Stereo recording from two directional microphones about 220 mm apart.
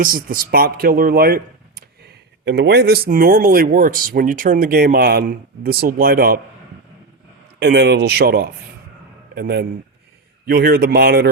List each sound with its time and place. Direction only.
0.0 s speech: 40° right (ahead or behind)
7.6 s speech: 50° right (ahead or behind)